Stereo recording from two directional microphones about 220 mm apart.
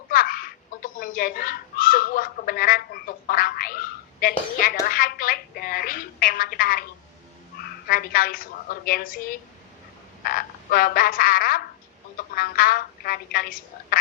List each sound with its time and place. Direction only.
0.1 s a woman's voice: 40° left (ahead or behind)
10.2 s frog: 40° left (ahead or behind)
12.1 s a woman's voice: 40° left (ahead or behind)